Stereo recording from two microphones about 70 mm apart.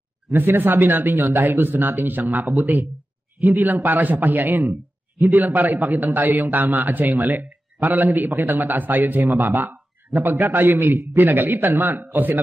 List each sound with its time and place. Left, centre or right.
0.3 s a man's voice: right